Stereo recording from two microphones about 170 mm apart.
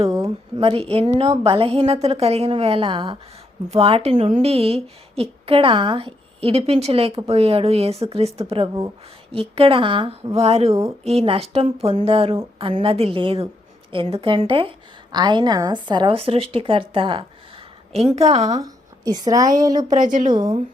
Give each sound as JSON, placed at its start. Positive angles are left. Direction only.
{"t": 0.2, "sound": "a woman's voice", "side_deg": -35}
{"t": 18.6, "sound": "a woman's voice", "side_deg": -20}
{"t": 19.9, "sound": "a woman's voice", "side_deg": -50}
{"t": 20.3, "sound": "a woman's voice", "side_deg": -25}